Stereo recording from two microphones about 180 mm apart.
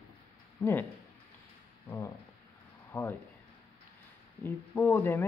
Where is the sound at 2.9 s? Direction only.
10° left (ahead or behind).